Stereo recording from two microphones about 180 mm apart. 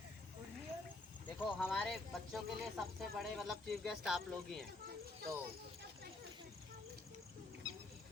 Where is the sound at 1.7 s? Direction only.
Centre (ahead or behind).